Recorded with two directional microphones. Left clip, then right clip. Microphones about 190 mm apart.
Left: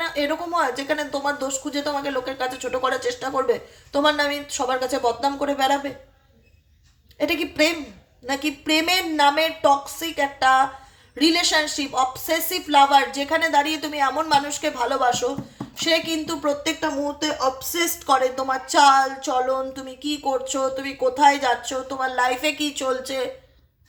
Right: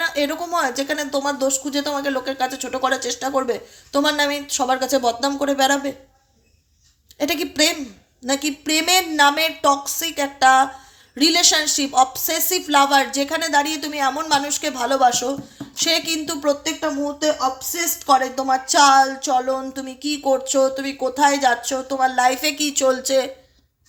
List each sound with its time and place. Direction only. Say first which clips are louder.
0.0 s speech: right 2 dB; 35° right (ahead or behind)
7.2 s speech: right 1 dB; 35° right (ahead or behind)